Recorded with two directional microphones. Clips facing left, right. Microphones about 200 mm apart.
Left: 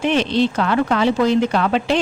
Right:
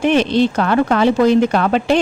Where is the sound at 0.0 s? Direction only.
50° right (ahead or behind).